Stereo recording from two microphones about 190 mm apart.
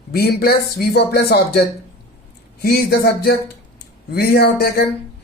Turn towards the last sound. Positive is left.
turn(degrees=50)  # may be behind; listen again after turning